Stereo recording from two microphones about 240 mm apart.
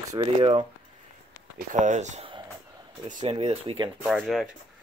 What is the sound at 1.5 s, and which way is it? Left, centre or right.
Speech, right.